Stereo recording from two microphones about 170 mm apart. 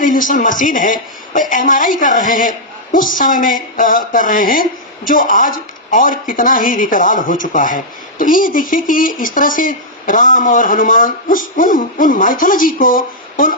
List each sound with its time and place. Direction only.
0.0 s speech: 50° left (ahead or behind)